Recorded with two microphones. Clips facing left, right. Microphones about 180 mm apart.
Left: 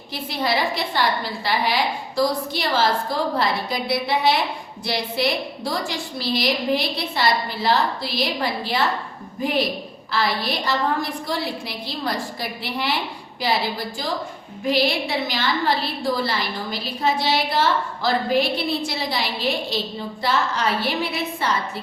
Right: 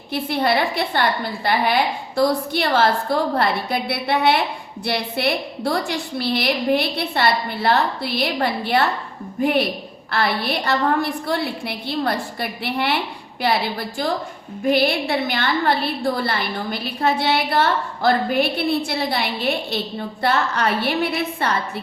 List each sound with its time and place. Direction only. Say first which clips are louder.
0.1 s a woman's voice: right 4 dB; 55° right (ahead or behind)